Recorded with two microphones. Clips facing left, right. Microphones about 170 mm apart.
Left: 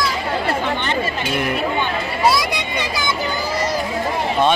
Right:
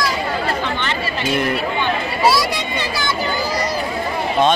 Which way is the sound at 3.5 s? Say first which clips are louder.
Even; 30° left (ahead or behind).